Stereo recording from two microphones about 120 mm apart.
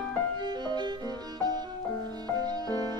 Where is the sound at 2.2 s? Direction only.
35° right (ahead or behind).